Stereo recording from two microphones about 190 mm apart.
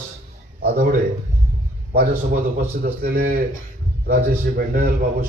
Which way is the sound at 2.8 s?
50° right (ahead or behind).